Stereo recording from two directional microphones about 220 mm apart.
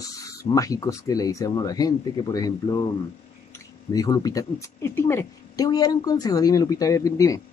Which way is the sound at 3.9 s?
15° left (ahead or behind).